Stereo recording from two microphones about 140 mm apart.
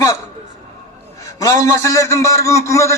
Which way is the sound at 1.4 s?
20° left (ahead or behind).